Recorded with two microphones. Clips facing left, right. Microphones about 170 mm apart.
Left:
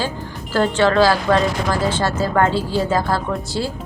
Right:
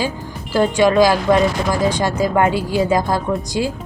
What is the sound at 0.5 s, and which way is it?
Speech, 10° right (ahead or behind).